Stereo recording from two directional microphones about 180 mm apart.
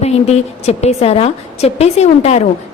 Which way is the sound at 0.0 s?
35° left (ahead or behind).